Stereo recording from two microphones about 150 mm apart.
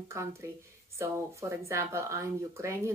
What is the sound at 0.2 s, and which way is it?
Speech, 20° right (ahead or behind).